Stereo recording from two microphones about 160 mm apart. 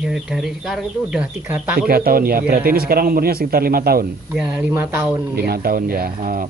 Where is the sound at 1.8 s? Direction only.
65° right (ahead or behind).